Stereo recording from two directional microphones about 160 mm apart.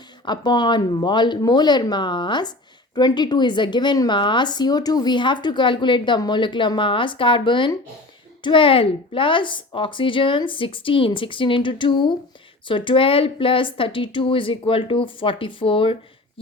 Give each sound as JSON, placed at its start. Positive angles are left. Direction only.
{"t": 0.3, "sound": "a woman's voice", "side_deg": 30}